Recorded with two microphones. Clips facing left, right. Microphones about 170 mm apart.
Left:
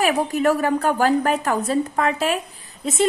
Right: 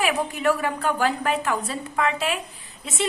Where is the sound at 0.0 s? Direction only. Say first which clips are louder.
Left 4 dB; 40° left (ahead or behind).